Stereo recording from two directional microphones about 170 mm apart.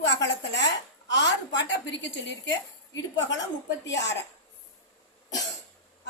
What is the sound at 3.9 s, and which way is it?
Speech, 90° left.